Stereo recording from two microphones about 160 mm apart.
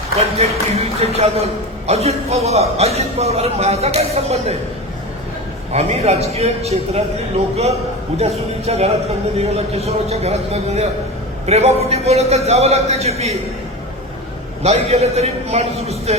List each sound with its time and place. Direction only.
0.3 s a man's voice: 40° right (ahead or behind)
5.7 s a man's voice: 40° right (ahead or behind)
8.2 s a man's voice: 40° right (ahead or behind)
14.6 s a man's voice: 40° right (ahead or behind)